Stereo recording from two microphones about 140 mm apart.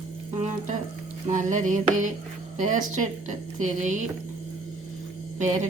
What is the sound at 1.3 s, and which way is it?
Speech, 65° right (ahead or behind).